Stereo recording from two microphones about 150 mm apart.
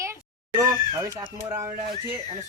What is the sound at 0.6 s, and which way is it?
Speech, 20° right (ahead or behind).